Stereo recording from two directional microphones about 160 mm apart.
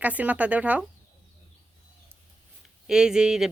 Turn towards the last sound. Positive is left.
turn(degrees=-5)  # may be behind; listen again after turning